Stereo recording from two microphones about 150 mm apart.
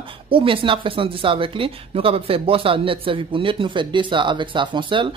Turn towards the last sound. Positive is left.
turn(degrees=-35)  # may be behind; listen again after turning